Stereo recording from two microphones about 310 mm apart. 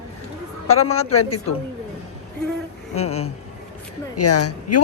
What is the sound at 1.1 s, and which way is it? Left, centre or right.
Speech, left.